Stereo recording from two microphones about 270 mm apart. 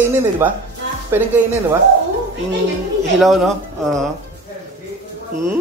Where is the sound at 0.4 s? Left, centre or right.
Centre.